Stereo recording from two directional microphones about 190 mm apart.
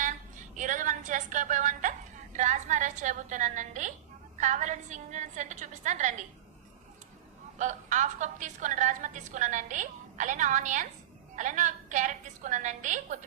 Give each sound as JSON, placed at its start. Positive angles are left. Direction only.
{"t": 0.5, "sound": "a sound", "side_deg": -40}
{"t": 2.3, "sound": "a woman's voice", "side_deg": -40}
{"t": 7.6, "sound": "a woman's voice", "side_deg": -40}